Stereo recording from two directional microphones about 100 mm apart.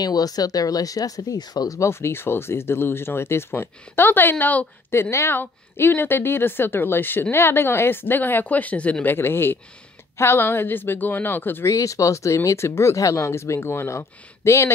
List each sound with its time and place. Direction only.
0.0 s speech: 40° left (ahead or behind); by 11.7 s 20° left (ahead or behind)
11.7 s speech: 35° left (ahead or behind)